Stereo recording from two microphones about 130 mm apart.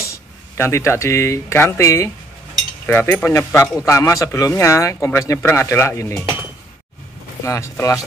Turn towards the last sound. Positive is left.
turn(degrees=20)  # may be behind; listen again after turning